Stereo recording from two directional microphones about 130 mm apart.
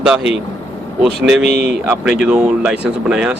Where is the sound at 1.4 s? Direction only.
55° left (ahead or behind).